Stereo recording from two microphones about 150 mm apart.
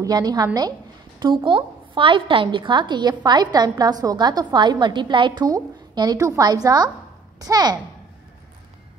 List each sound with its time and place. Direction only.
0.0 s a woman's voice: 25° right (ahead or behind)